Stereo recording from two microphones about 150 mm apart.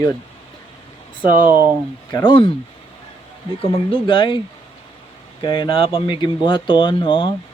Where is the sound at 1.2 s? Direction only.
60° right (ahead or behind).